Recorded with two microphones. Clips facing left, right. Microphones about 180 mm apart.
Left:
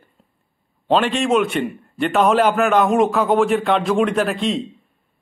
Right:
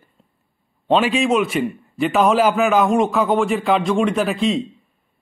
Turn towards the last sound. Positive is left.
turn(degrees=0)  # may be behind; listen again after turning